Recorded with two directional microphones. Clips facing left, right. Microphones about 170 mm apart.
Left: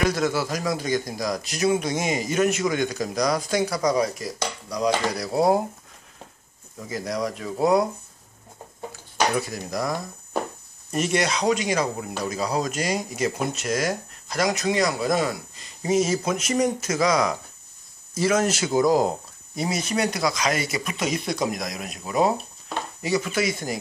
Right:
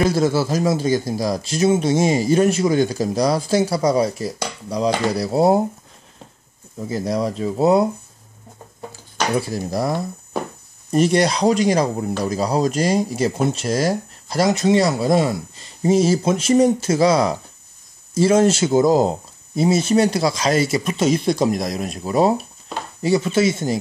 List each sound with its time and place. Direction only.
0.0 s speech: 30° right (ahead or behind)
6.8 s speech: 30° right (ahead or behind)
9.4 s speech: 30° right (ahead or behind)